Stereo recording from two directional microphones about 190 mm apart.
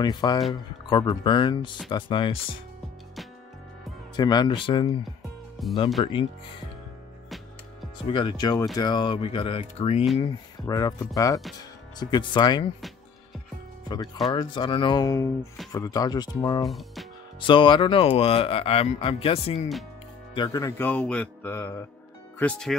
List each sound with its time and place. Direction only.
0.0 s speech: 20° left (ahead or behind)
4.2 s speech: 20° left (ahead or behind)
5.6 s speech: centre (ahead or behind)
6.0 s speech: 30° left (ahead or behind)
8.1 s speech: 25° left (ahead or behind)
10.7 s speech: 20° left (ahead or behind)
13.8 s speech: 20° left (ahead or behind)
16.6 s music: centre (ahead or behind)
17.5 s speech: 25° left (ahead or behind)
20.3 s speech: 20° left (ahead or behind); by 22.8 s 5° left (ahead or behind)